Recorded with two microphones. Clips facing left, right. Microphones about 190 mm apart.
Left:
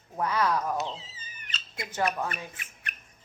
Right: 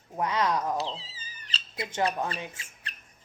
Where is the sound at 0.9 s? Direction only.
30° right (ahead or behind).